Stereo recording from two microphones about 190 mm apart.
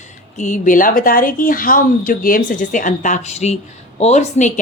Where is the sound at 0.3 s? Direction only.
40° left (ahead or behind).